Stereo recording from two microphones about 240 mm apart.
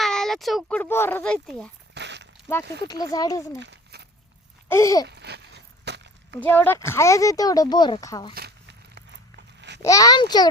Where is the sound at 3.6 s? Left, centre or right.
Right.